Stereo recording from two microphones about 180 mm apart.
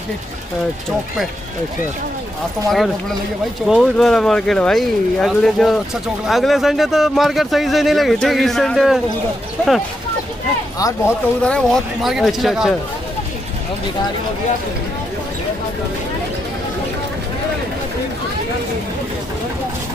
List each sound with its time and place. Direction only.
3.6 s speech: centre (ahead or behind)
10.8 s speech: 20° left (ahead or behind)
11.4 s speech: 5° left (ahead or behind)